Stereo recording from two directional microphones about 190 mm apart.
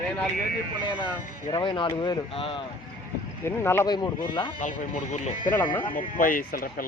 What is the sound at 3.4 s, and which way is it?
Speech, 10° left (ahead or behind).